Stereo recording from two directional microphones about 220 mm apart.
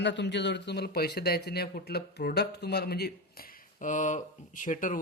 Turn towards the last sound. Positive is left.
turn(degrees=35)  # may be behind; listen again after turning